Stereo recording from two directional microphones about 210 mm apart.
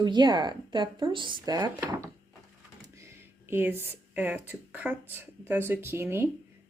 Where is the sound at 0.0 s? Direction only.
20° right (ahead or behind).